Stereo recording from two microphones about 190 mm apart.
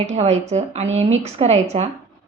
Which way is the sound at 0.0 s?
35° right (ahead or behind).